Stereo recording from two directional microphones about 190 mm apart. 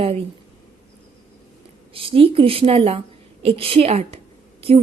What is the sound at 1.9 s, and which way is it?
A woman's voice, 30° right (ahead or behind).